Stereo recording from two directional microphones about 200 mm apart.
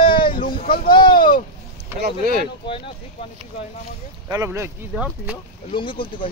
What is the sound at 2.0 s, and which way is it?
Speech, 45° right (ahead or behind).